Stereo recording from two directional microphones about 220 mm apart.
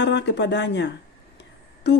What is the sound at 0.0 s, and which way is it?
Speech, 50° left (ahead or behind).